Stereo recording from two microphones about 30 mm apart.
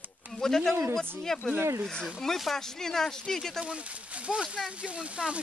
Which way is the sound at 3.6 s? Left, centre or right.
Right.